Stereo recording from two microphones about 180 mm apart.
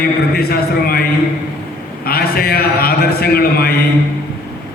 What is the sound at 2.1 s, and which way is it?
A man's voice, 55° left (ahead or behind).